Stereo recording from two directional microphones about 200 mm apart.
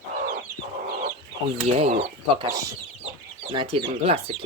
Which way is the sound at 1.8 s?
30° right (ahead or behind).